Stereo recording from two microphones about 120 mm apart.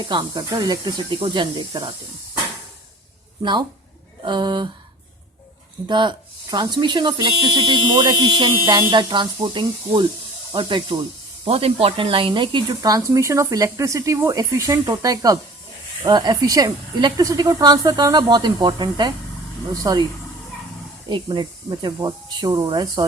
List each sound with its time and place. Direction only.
0.0 s speech: 40° right (ahead or behind)
4.2 s speech: 40° right (ahead or behind)
5.9 s speech: 40° right (ahead or behind)
11.4 s speech: 55° right (ahead or behind); by 20.1 s 35° right (ahead or behind)
21.1 s speech: 40° right (ahead or behind)